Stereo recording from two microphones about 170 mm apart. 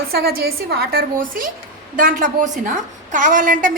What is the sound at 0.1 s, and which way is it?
A woman's voice, 65° right (ahead or behind).